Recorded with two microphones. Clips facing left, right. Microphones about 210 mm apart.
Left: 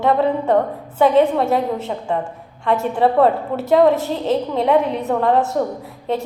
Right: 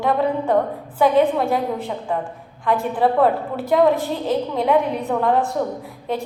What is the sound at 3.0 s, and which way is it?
A woman's voice, 25° left (ahead or behind).